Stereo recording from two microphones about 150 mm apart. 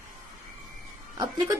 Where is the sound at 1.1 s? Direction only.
25° right (ahead or behind).